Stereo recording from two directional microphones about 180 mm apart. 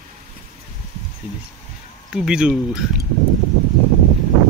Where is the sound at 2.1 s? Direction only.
5° right (ahead or behind).